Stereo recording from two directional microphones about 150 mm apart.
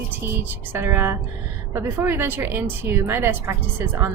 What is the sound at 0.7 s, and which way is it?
Speech, 15° right (ahead or behind).